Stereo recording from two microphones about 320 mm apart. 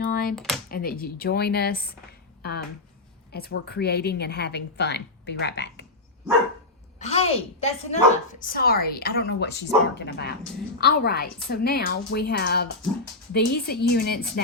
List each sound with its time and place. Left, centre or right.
0.1 s computer keyboard: left
0.3 s speech: centre
0.7 s a woman's voice: left
7.0 s a woman's voice: centre